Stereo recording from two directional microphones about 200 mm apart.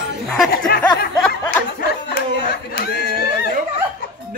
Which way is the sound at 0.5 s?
50° left (ahead or behind).